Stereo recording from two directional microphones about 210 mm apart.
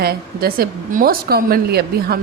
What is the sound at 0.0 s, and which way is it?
Speech, 45° right (ahead or behind).